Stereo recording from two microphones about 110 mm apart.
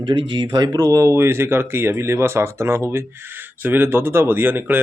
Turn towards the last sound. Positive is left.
turn(degrees=-15)  # may be behind; listen again after turning